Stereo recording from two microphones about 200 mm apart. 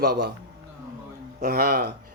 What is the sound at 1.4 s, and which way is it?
Speech, 50° right (ahead or behind).